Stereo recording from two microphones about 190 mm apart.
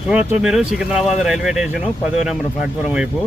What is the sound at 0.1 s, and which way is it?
Speech, 5° right (ahead or behind).